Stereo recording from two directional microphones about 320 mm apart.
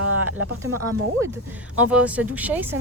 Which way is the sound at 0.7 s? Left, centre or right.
Right.